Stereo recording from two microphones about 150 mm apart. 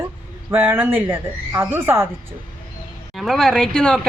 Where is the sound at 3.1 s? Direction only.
Centre (ahead or behind).